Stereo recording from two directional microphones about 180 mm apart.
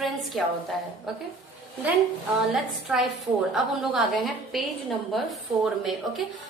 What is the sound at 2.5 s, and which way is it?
A woman's voice, centre (ahead or behind).